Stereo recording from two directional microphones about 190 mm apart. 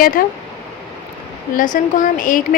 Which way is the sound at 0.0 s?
50° left (ahead or behind).